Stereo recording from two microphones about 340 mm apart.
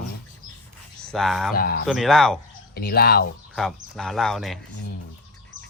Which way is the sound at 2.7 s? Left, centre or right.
Left.